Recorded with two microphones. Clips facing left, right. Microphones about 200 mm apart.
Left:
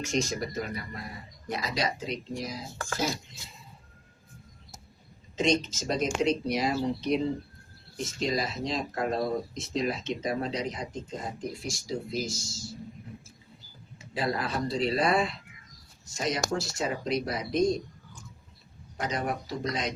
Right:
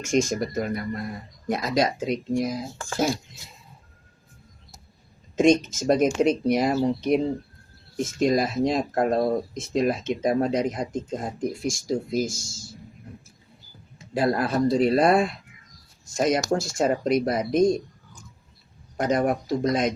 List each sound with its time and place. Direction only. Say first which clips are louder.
0.0 s speech: right 7 dB; 50° right (ahead or behind)
5.4 s speech: right 8 dB; 50° right (ahead or behind)
8.2 s speech: right 9 dB; 50° right (ahead or behind)
14.1 s speech: right 7 dB; 50° right (ahead or behind)
18.9 s speech: right 9 dB; 50° right (ahead or behind)